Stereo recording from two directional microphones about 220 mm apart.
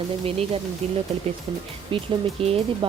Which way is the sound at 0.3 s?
25° right (ahead or behind).